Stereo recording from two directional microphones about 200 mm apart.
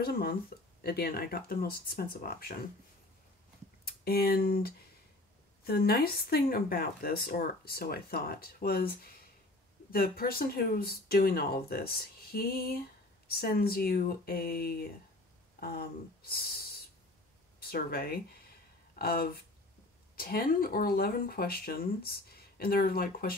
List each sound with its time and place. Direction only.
0.0 s speech: 50° left (ahead or behind)
3.8 s speech: 50° left (ahead or behind)